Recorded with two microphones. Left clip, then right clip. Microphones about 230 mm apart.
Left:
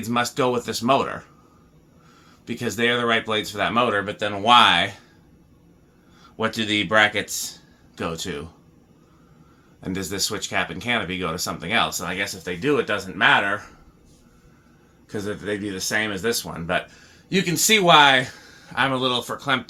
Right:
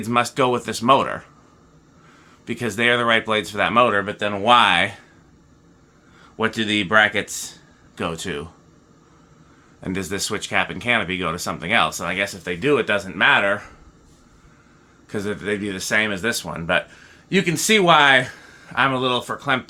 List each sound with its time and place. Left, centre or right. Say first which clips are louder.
0.0 s speech: right 3 dB; right
2.5 s speech: right 3 dB; right
6.3 s speech: right 2 dB; right
9.8 s speech: right 1 dB; right
15.1 s speech: right 3 dB; right